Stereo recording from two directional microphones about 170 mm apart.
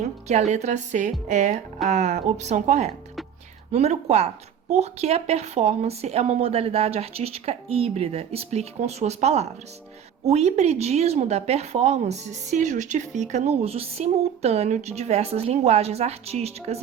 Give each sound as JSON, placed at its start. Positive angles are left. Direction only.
{"t": 0.3, "sound": "a woman's voice", "side_deg": -40}